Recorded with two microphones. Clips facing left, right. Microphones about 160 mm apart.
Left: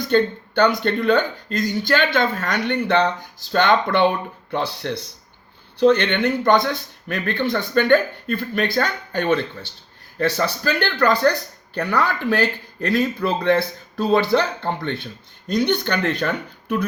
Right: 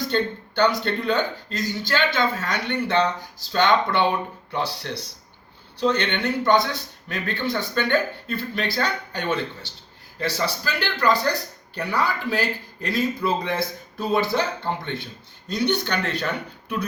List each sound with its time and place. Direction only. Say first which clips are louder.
0.1 s speech: left 6 dB; 50° left (ahead or behind)